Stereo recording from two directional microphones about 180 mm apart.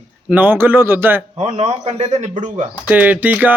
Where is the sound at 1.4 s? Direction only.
25° right (ahead or behind); by 2.3 s 40° right (ahead or behind).